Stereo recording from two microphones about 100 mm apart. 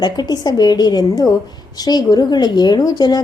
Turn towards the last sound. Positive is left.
turn(degrees=45)  # may be behind; listen again after turning